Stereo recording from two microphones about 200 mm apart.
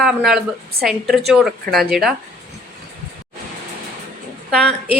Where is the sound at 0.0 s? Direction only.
Centre (ahead or behind).